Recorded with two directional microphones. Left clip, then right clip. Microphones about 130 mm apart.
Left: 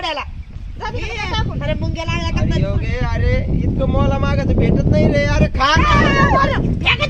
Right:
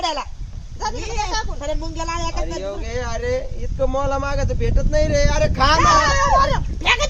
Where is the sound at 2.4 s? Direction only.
5° left (ahead or behind).